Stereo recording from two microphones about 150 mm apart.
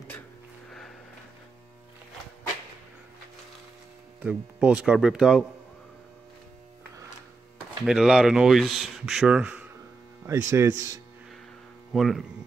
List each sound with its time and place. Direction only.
0.7 s music: centre (ahead or behind)
4.2 s speech: 10° right (ahead or behind)
7.5 s speech: 5° right (ahead or behind)
10.2 s mains hum: 20° right (ahead or behind)
11.9 s speech: centre (ahead or behind)